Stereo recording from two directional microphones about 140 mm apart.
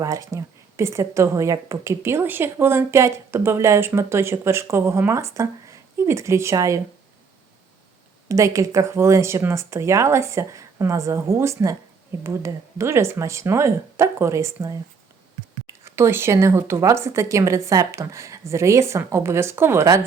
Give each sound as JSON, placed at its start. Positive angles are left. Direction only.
{"t": 0.0, "sound": "a woman's voice", "side_deg": -25}
{"t": 8.3, "sound": "a woman's voice", "side_deg": -25}